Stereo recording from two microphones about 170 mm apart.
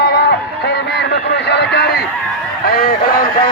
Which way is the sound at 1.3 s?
80° left.